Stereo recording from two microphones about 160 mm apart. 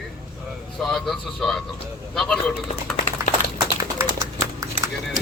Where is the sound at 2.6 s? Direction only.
50° left (ahead or behind).